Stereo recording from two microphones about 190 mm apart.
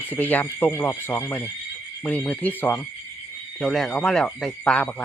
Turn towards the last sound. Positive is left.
turn(degrees=5)  # may be behind; listen again after turning